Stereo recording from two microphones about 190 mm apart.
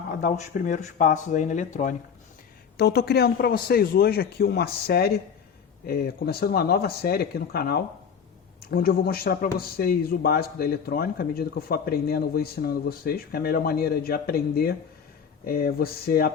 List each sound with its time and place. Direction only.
0.2 s a man's voice: 45° left (ahead or behind)
2.7 s a man's voice: 55° left (ahead or behind)